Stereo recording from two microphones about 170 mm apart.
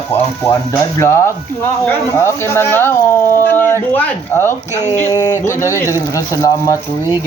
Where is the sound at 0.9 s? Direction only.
15° left (ahead or behind).